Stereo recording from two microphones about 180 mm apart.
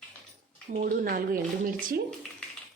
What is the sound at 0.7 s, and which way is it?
Speech, 50° right (ahead or behind).